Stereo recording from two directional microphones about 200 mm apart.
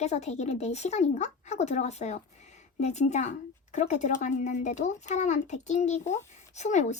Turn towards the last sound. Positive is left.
turn(degrees=35)  # may be behind; listen again after turning